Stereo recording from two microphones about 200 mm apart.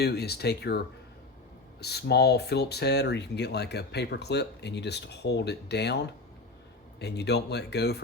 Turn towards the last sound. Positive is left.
turn(degrees=55)  # may be behind; listen again after turning